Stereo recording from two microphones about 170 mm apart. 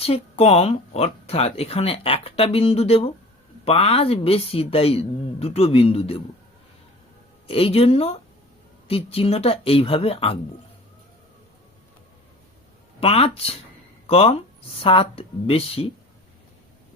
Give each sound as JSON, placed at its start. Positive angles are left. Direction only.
{"t": 0.0, "sound": "speech", "side_deg": 35}
{"t": 7.4, "sound": "speech", "side_deg": 35}
{"t": 13.0, "sound": "speech", "side_deg": 35}